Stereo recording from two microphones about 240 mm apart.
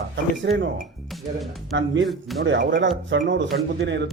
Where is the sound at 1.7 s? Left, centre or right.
Right.